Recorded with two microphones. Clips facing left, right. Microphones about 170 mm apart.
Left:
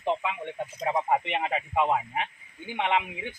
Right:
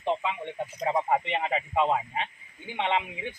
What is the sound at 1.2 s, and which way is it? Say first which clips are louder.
Speech: even; 10° left (ahead or behind).